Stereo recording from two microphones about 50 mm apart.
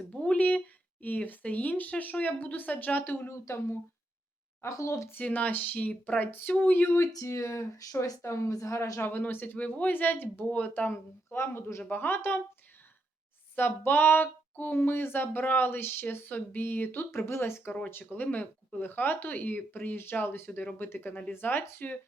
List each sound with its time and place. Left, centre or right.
0.1 s speech: left
3.2 s speech: left
4.6 s speech: left
5.2 s speech: left
6.9 s speech: left
9.0 s speech: left
9.6 s speech: left
10.5 s speech: left
11.3 s speech: left
11.9 s speech: left
13.6 s speech: left
17.2 s speech: left
18.1 s speech: left